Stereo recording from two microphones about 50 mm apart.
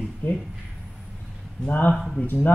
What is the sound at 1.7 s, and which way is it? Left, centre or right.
Speech, left.